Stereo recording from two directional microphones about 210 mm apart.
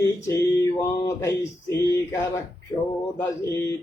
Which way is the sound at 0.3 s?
15° left (ahead or behind).